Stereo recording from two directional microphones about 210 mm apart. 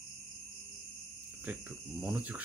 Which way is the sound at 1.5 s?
5° right (ahead or behind).